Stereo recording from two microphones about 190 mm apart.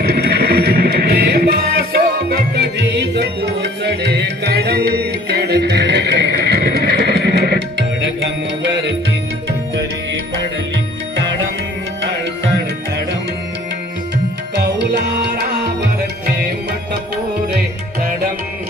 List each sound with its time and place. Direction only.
0.0 s music: 60° right (ahead or behind)